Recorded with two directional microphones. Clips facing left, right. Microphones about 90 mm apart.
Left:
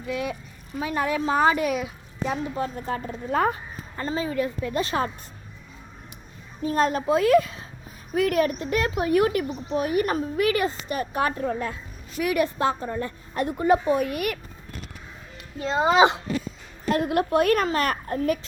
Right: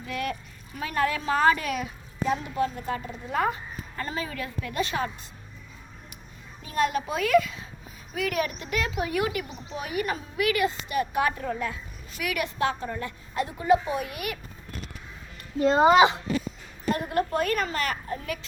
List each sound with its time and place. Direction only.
0.1 s a woman's voice: 15° left (ahead or behind)
2.8 s a woman's voice: 45° left (ahead or behind)
3.9 s a woman's voice: 25° left (ahead or behind)
6.6 s a woman's voice: 35° left (ahead or behind)
8.1 s a woman's voice: 45° left (ahead or behind)
13.3 s a woman's voice: 50° left (ahead or behind)
15.6 s speech: 5° right (ahead or behind)
16.9 s a woman's voice: 90° left; by 17.9 s 55° left (ahead or behind)
17.9 s a child's voice: 40° left (ahead or behind)